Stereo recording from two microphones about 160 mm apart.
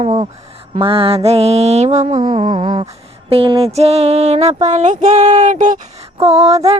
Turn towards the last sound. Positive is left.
turn(degrees=-40)  # may be behind; listen again after turning